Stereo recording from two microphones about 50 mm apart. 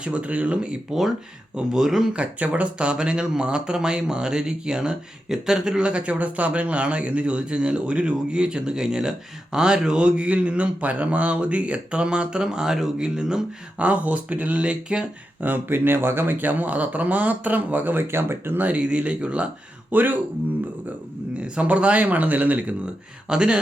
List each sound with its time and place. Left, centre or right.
0.0 s speech: right
1.5 s speech: centre
2.1 s speech: right
13.7 s speech: right
15.4 s speech: right
18.6 s speech: right
19.9 s speech: right
21.3 s speech: right
23.3 s speech: centre